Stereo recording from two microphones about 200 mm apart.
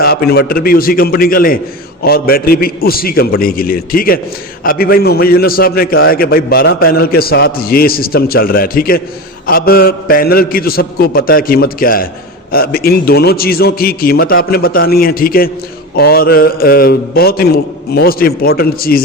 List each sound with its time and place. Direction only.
0.0 s a man's voice: 50° left (ahead or behind)